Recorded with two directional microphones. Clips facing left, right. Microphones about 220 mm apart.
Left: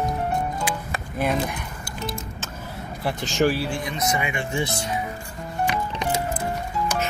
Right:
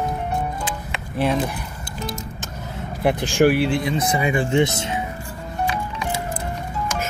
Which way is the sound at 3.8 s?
30° right (ahead or behind).